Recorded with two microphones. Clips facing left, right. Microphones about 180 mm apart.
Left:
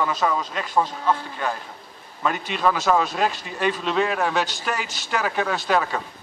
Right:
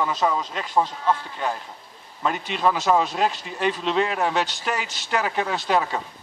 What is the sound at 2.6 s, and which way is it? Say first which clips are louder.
A man's voice: even; 20° right (ahead or behind).